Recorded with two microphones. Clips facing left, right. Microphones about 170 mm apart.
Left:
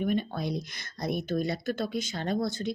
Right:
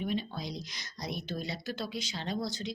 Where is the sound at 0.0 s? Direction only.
55° left (ahead or behind).